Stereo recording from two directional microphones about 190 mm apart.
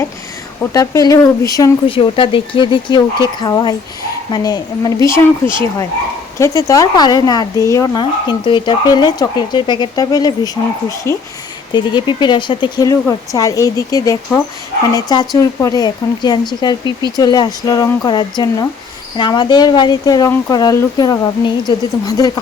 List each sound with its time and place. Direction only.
0.6 s speech: 15° left (ahead or behind)
6.4 s speech: 15° left (ahead or behind)